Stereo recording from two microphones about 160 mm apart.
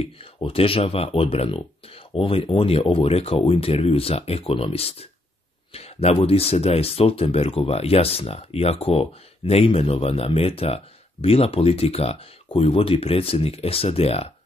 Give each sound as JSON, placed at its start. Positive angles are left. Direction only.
{"t": 0.0, "sound": "speech", "side_deg": 35}